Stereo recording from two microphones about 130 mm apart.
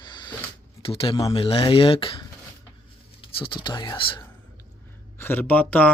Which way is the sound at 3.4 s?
40° left (ahead or behind).